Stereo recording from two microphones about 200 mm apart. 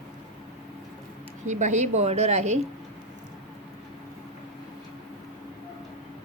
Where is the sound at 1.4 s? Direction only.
35° right (ahead or behind).